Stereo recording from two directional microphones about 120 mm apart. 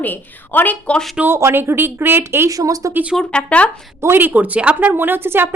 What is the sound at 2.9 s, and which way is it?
Speech, 10° right (ahead or behind).